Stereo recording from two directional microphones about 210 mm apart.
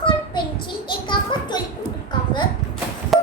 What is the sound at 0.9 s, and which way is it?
Children playing, 20° left (ahead or behind).